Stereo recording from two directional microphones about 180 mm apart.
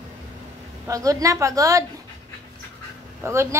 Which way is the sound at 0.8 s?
20° right (ahead or behind).